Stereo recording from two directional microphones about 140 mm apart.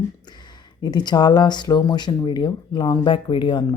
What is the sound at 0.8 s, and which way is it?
Speech, 30° left (ahead or behind).